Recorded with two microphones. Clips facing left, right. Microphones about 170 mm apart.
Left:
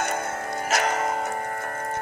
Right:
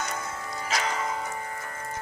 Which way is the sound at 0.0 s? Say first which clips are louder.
Left 6 dB; 55° left (ahead or behind).